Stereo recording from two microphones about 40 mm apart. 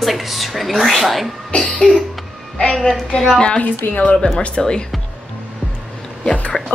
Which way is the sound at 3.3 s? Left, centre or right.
Left.